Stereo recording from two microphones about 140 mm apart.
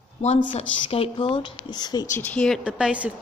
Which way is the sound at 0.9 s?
40° left (ahead or behind).